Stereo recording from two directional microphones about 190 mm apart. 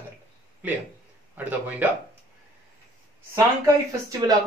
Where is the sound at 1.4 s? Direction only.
10° right (ahead or behind).